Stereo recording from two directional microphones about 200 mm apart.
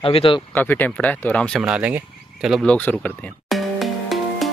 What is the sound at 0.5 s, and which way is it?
Speech, 10° left (ahead or behind).